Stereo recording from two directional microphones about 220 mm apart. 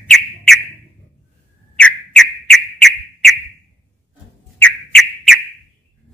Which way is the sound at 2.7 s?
Centre (ahead or behind).